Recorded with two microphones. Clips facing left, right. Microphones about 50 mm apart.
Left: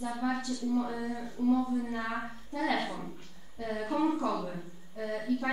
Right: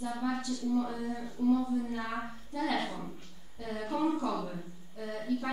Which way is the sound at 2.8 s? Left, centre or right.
Centre.